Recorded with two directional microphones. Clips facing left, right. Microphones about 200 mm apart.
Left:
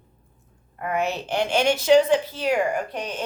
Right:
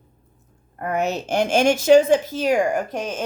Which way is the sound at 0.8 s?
45° right (ahead or behind).